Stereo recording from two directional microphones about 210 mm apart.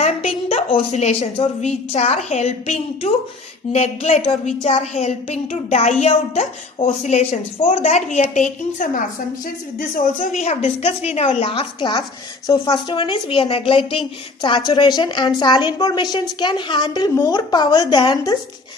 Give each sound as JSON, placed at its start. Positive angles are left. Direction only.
{"t": 0.5, "sound": "a woman's voice", "side_deg": 25}